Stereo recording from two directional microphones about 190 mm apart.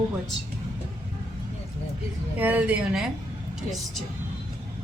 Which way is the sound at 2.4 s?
10° right (ahead or behind).